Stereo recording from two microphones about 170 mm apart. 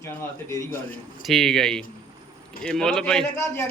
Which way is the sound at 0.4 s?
15° left (ahead or behind).